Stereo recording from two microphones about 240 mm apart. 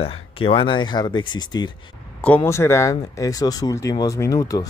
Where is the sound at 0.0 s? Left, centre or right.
Left.